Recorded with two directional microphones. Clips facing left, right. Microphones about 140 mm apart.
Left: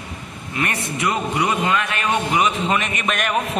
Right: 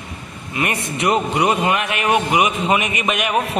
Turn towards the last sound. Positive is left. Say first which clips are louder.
# right 2 dB
turn(degrees=-5)  # may be behind; listen again after turning